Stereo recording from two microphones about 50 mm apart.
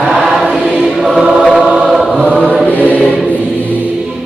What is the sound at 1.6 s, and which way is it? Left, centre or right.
Chant, centre.